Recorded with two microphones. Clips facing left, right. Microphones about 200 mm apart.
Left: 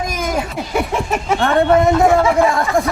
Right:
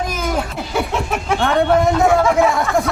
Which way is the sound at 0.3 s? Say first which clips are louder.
Left 1 dB; 5° left (ahead or behind).